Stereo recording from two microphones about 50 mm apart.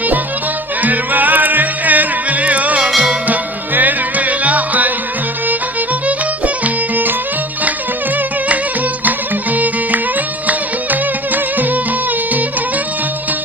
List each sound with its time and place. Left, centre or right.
0.8 s music: right
9.0 s music: right